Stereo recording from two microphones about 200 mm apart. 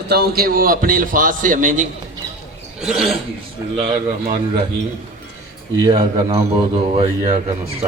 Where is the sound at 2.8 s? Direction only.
Centre (ahead or behind).